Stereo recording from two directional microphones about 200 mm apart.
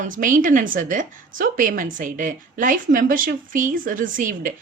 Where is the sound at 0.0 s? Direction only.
40° right (ahead or behind).